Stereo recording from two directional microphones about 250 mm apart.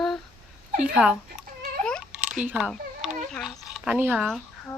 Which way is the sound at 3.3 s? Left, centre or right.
Centre.